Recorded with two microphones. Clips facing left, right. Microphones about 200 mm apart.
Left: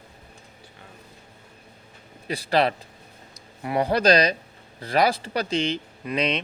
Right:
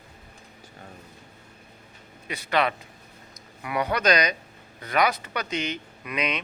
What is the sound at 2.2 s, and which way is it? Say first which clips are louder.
Speech: left 3 dB; 35° left (ahead or behind).